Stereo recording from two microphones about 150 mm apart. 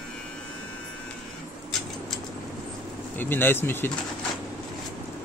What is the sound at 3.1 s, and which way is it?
Speech, 15° left (ahead or behind).